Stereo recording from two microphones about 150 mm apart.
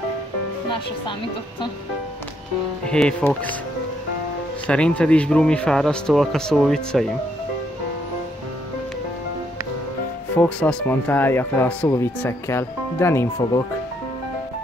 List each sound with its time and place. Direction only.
2.9 s speech: 5° left (ahead or behind)
4.6 s a man's voice: 10° left (ahead or behind)
10.3 s speech: 10° left (ahead or behind)